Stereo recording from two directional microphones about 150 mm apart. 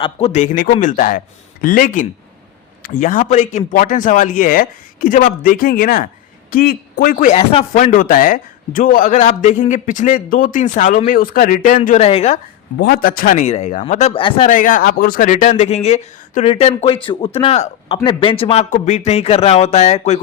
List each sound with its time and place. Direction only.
0.0 s a man's voice: 40° left (ahead or behind); by 11.8 s 65° left (ahead or behind)
11.9 s speech: 45° left (ahead or behind)
12.8 s a man's voice: 80° left; by 14.4 s 35° left (ahead or behind)
14.4 s speech: 60° left (ahead or behind); by 18.6 s 35° left (ahead or behind)
18.7 s speech: 50° left (ahead or behind)